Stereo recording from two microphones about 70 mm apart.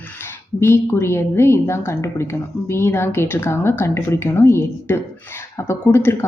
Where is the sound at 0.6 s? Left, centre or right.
Left.